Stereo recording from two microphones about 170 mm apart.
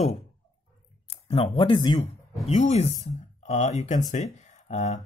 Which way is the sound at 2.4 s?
40° left (ahead or behind).